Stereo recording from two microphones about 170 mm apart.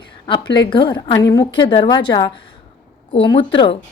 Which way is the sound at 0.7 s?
30° left (ahead or behind).